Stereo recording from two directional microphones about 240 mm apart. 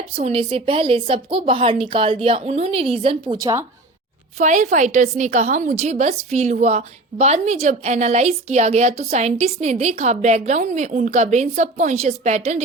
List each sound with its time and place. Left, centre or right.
0.0 s a woman's voice: right
4.4 s a woman's voice: right